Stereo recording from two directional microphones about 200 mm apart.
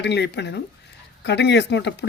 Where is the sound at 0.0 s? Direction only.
60° left (ahead or behind).